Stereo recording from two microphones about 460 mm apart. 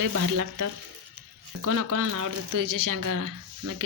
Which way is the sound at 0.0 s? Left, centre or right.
Right.